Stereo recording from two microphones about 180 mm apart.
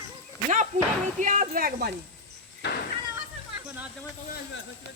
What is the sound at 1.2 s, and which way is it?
Speech, 45° right (ahead or behind).